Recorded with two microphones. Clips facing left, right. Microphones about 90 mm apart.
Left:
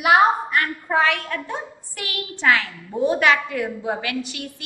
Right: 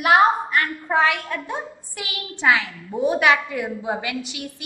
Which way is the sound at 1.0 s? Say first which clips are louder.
Even; 15° right (ahead or behind).